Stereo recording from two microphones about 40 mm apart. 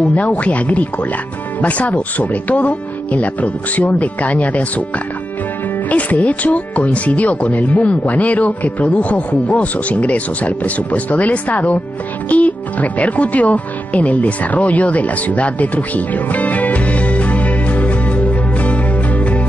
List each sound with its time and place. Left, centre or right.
0.0 s speech: left
12.3 s music: left